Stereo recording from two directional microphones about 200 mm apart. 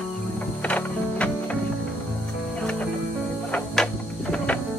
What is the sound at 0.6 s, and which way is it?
Music, 5° left (ahead or behind).